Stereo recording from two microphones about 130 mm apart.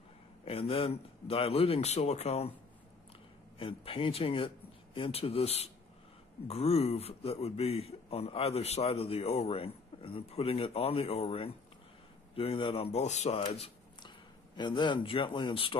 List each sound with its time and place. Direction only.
0.5 s a man's voice: 50° left (ahead or behind)
3.5 s a man's voice: 45° left (ahead or behind); by 13.4 s 60° left (ahead or behind)
13.4 s a sound: 40° left (ahead or behind)
14.6 s speech: 35° left (ahead or behind)